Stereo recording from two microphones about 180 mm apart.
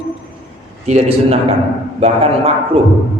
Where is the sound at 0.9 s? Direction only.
35° right (ahead or behind).